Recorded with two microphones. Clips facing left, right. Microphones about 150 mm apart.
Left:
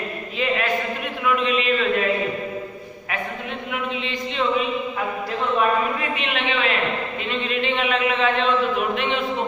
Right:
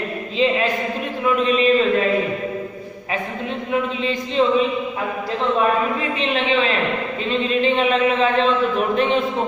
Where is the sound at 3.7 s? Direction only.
35° right (ahead or behind).